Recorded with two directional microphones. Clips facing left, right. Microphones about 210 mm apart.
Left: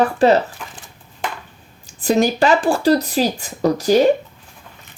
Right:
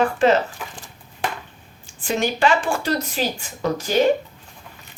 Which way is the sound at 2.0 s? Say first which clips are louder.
Left 5 dB; 40° left (ahead or behind).